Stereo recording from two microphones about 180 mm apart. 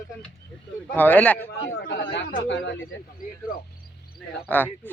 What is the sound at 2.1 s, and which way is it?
Speech, 90° left.